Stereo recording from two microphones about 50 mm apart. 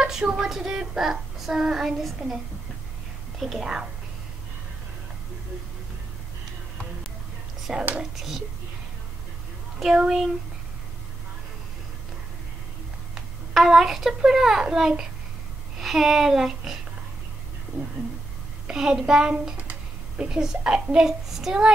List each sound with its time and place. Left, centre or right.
0.0 s child singing: centre
3.3 s child singing: centre
7.9 s child singing: centre
9.9 s child singing: centre
13.1 s a child's voice: centre
15.8 s child singing: centre
18.7 s child singing: centre